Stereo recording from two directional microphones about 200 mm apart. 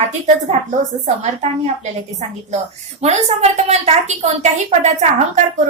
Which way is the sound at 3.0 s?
35° right (ahead or behind).